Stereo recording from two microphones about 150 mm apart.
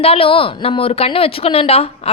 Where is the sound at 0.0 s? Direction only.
40° left (ahead or behind).